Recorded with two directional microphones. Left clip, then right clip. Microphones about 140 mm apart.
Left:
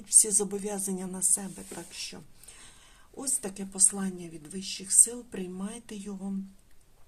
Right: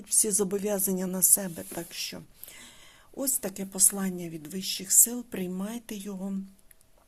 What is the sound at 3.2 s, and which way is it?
A woman's voice, 60° right (ahead or behind).